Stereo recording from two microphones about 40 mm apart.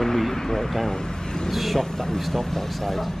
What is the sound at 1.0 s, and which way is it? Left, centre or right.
Vehicle, centre.